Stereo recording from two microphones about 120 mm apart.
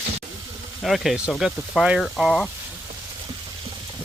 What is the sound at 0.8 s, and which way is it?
Speech, centre (ahead or behind).